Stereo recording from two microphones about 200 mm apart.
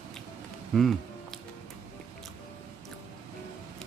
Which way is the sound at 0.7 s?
Centre (ahead or behind).